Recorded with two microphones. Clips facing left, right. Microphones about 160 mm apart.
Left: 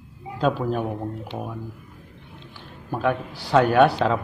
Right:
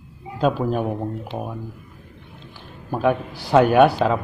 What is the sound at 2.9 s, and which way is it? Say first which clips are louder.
Speech: right 3 dB; 15° right (ahead or behind).